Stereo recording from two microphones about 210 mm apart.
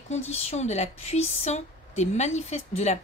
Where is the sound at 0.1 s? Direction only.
30° left (ahead or behind).